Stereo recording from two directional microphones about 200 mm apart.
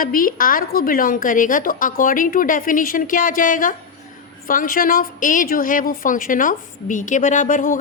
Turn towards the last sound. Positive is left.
turn(degrees=40)  # may be behind; listen again after turning